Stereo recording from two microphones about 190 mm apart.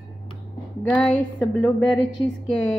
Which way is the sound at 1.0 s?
Centre (ahead or behind).